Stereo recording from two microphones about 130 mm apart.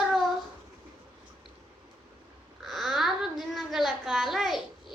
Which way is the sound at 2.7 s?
Centre (ahead or behind).